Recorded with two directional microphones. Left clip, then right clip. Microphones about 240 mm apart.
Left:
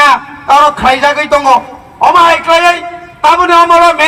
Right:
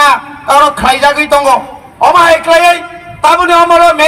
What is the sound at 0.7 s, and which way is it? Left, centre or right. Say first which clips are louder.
A man's voice: even; right.